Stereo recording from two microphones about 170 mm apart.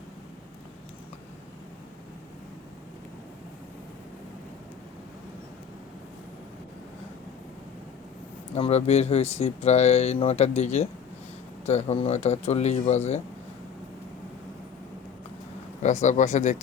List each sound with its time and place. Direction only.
8.5 s speech: 35° left (ahead or behind)
15.8 s speech: 45° left (ahead or behind)